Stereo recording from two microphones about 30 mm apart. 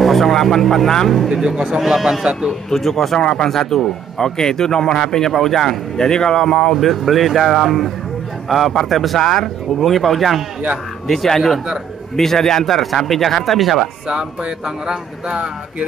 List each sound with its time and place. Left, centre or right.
0.0 s a sound: centre
0.3 s speech: centre
1.3 s speech: right
1.8 s a man's voice: centre
2.7 s a man's voice: centre
5.9 s a man's voice: left
6.7 s speech: centre
9.2 s speech: centre
14.0 s speech: right